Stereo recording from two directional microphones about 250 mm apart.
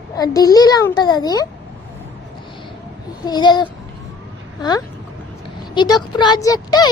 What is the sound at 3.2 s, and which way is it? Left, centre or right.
Speech, centre.